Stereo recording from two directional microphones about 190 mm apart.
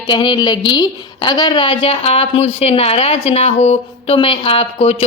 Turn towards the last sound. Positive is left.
turn(degrees=30)  # may be behind; listen again after turning